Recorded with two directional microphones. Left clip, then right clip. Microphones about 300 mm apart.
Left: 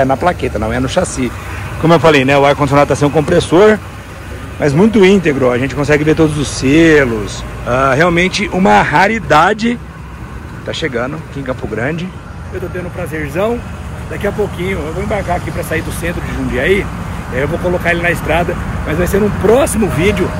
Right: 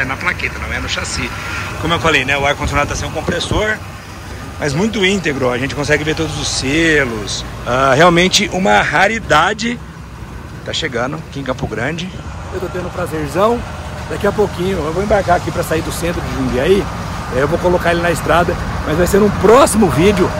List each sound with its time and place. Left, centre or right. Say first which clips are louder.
0.0 s speech: left 5 dB; centre
4.6 s speech: left 7 dB; centre
13.4 s speech: right 3 dB; centre